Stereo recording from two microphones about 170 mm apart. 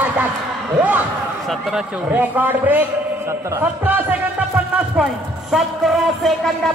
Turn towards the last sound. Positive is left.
turn(degrees=0)  # may be behind; listen again after turning